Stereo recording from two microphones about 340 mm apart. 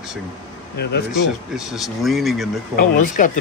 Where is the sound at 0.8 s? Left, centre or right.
Left.